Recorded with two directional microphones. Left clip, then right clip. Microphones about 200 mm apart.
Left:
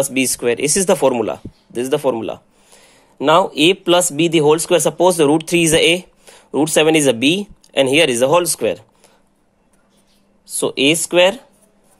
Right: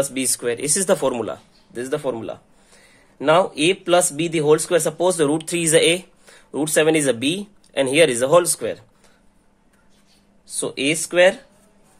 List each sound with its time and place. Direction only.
0.0 s speech: 25° left (ahead or behind)
10.4 s speech: 30° left (ahead or behind)